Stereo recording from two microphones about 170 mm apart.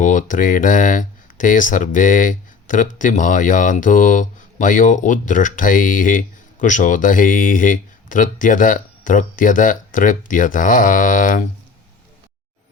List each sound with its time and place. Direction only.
0.0 s speech: 45° left (ahead or behind)